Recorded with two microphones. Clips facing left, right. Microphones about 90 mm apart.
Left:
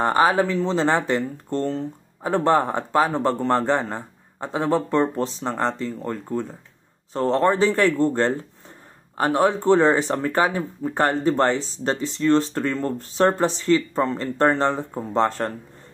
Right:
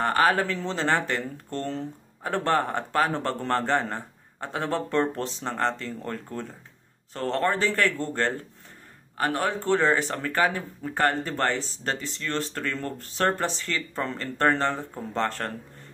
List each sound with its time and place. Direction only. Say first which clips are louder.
0.0 s speech: left 4 dB; 15° left (ahead or behind)